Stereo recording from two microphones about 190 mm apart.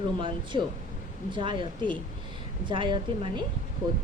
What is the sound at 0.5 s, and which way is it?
A woman's voice, 25° right (ahead or behind).